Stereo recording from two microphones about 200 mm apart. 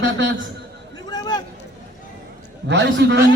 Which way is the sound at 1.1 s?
20° left (ahead or behind).